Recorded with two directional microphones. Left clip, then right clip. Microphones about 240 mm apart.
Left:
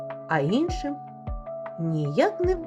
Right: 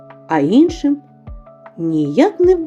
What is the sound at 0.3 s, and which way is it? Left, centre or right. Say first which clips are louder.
Speech: right 12 dB; right.